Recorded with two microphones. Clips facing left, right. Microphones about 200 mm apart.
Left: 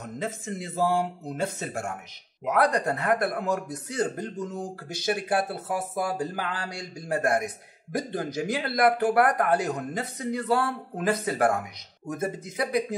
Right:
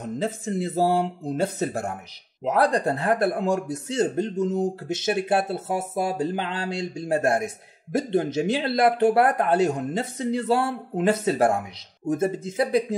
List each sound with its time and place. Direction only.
0.0 s speech: 35° right (ahead or behind)